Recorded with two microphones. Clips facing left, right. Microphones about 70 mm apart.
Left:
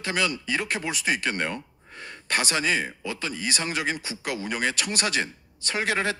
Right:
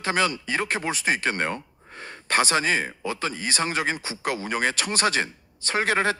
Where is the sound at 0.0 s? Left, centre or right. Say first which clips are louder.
Right 3 dB; right.